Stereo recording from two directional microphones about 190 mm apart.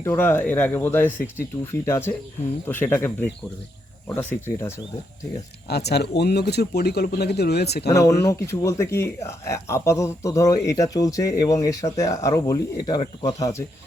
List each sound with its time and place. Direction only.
0.0 s speech: 10° left (ahead or behind)
5.6 s speech: 60° left (ahead or behind)
7.9 s speech: 15° left (ahead or behind)